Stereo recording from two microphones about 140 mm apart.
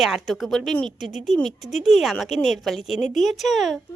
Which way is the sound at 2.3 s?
55° left (ahead or behind).